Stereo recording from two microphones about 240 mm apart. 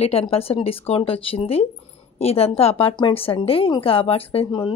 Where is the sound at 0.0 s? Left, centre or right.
Left.